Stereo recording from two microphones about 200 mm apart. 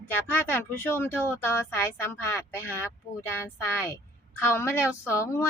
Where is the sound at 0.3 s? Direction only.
10° left (ahead or behind).